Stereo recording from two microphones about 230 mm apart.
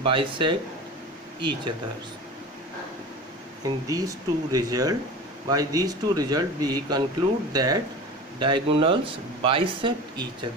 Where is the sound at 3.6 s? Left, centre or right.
Centre.